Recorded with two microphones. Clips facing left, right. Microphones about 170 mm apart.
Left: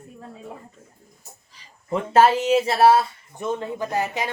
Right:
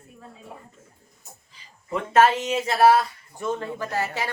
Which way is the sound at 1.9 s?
30° left (ahead or behind).